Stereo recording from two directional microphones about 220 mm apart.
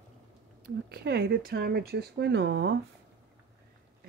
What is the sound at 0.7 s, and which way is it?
Speech, 45° right (ahead or behind).